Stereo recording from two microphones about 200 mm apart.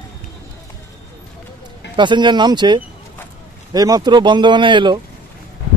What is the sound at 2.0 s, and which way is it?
Speech, 25° right (ahead or behind).